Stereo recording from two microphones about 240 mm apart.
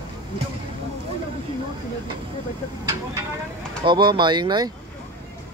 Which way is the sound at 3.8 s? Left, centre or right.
Centre.